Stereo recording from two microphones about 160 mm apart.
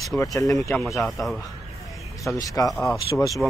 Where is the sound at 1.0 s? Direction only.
Centre (ahead or behind).